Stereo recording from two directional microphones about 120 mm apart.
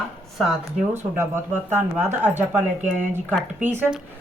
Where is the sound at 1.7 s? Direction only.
20° right (ahead or behind).